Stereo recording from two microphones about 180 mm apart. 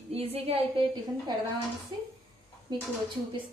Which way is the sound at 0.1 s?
35° right (ahead or behind).